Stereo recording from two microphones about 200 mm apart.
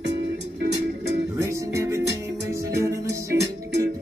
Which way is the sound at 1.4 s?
15° right (ahead or behind).